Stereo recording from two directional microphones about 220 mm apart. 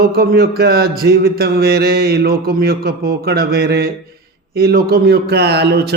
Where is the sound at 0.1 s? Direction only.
45° right (ahead or behind).